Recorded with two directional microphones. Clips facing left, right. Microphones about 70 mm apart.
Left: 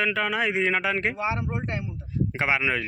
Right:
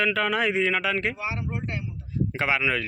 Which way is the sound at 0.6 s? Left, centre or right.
Left.